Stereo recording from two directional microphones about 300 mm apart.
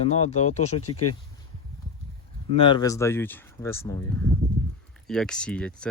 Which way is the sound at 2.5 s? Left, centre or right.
Centre.